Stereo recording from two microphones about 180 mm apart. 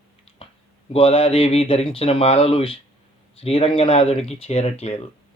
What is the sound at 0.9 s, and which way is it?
A man's voice, 30° left (ahead or behind).